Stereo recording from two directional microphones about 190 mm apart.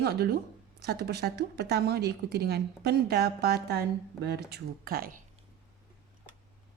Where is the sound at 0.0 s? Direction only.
55° right (ahead or behind).